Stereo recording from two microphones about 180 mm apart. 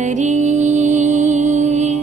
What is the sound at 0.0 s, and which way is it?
Music, 40° right (ahead or behind).